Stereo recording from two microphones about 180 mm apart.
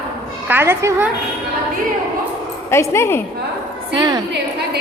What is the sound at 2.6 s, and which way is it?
Speech, 15° left (ahead or behind).